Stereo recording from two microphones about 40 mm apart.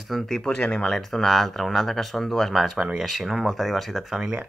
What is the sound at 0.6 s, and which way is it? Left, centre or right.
Speech, left.